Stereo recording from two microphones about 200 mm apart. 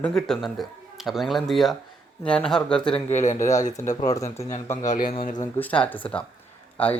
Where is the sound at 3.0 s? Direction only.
35° left (ahead or behind).